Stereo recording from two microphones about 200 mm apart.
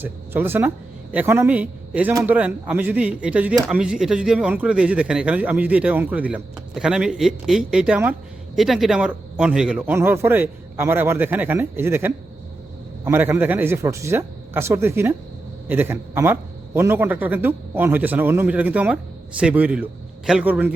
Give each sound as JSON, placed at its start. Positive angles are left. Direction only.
{"t": 0.0, "sound": "a man's voice", "side_deg": -10}